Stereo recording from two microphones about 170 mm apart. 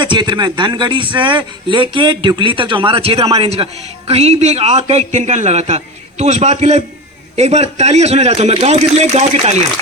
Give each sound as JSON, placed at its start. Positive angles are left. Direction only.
{"t": 0.0, "sound": "a man's voice", "side_deg": -25}